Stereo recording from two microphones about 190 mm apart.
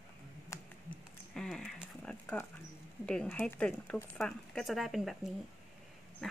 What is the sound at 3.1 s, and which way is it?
Speech, 5° left (ahead or behind).